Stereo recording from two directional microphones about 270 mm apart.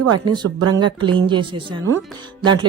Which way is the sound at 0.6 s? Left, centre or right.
Right.